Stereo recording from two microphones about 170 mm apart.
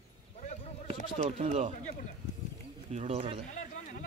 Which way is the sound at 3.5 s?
45° left (ahead or behind).